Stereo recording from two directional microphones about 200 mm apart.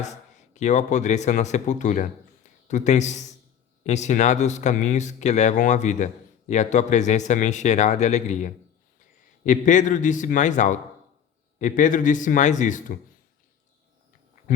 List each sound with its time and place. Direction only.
0.0 s speech: 35° left (ahead or behind)